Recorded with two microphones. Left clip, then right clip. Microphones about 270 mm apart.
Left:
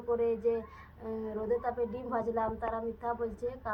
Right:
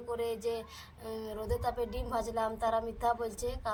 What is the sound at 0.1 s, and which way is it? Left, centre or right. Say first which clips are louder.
A woman's voice: left 5 dB; right.